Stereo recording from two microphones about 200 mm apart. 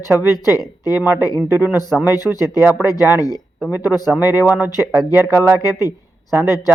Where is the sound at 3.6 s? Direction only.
10° right (ahead or behind).